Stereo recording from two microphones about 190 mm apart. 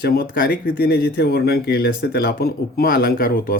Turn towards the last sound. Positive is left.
turn(degrees=50)  # may be behind; listen again after turning